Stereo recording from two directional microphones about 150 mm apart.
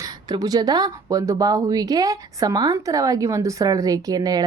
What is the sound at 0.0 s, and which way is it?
A woman's voice, 25° right (ahead or behind).